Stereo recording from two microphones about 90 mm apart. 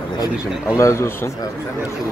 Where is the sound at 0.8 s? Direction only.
30° left (ahead or behind).